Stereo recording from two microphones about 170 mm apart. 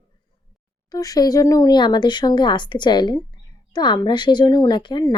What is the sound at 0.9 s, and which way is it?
Speech, 20° left (ahead or behind).